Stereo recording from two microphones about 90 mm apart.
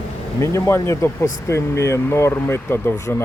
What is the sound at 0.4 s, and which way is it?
Speech, 35° left (ahead or behind).